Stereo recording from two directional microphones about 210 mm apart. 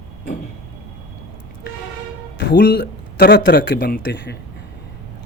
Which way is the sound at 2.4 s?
45° left (ahead or behind).